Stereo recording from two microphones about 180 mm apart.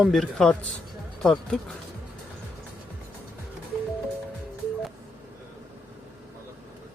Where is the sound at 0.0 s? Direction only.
Centre (ahead or behind).